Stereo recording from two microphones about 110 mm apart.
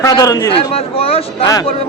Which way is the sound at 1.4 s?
35° left (ahead or behind).